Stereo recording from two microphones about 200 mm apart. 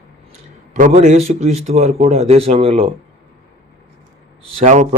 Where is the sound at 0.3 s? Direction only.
35° right (ahead or behind).